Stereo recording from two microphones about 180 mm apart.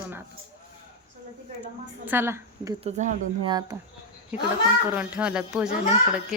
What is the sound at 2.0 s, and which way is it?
A woman's voice, 15° right (ahead or behind).